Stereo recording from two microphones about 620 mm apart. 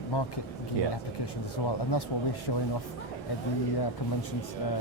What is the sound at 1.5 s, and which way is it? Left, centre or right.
Speech, left.